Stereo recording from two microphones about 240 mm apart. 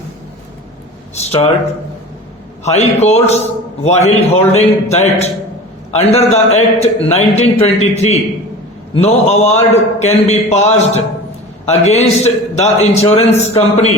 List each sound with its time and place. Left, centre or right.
1.1 s speech: left
2.6 s a man's voice: left